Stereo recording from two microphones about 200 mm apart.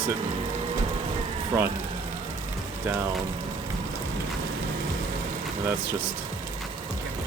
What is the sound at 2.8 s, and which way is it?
Speech, 10° right (ahead or behind).